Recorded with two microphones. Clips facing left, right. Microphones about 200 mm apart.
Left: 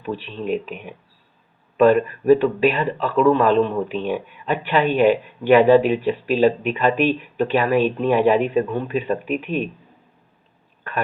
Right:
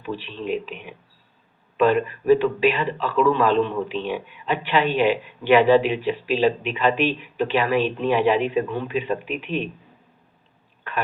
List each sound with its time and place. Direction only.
0.0 s a man's voice: 45° left (ahead or behind)